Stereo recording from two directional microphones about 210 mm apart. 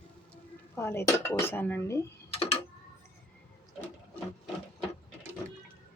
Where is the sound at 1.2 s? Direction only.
10° left (ahead or behind).